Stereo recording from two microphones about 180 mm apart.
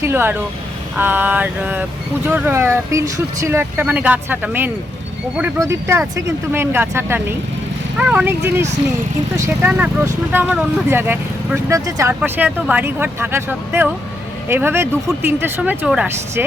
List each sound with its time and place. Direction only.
0.0 s speech: 10° right (ahead or behind)